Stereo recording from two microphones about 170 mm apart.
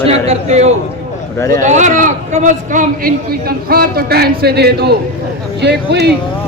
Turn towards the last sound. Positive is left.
turn(degrees=-90)